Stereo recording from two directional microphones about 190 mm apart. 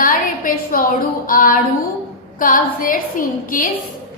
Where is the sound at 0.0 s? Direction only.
50° left (ahead or behind).